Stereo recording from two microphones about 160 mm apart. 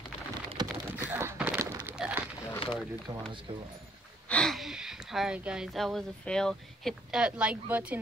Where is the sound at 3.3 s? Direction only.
30° right (ahead or behind).